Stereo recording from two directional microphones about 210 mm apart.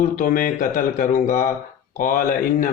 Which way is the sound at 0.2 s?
40° left (ahead or behind).